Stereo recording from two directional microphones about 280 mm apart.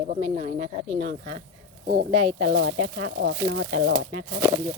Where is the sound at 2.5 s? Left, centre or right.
Right.